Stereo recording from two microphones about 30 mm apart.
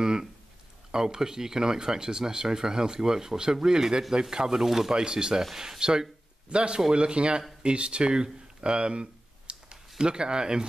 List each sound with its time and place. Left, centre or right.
0.0 s a sound: right
0.9 s speech: right
4.6 s speech: centre
4.9 s speech: right
6.5 s speech: right
9.5 s a sound: right
9.9 s speech: right